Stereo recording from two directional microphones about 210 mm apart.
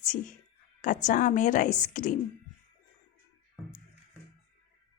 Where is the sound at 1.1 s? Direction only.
35° left (ahead or behind).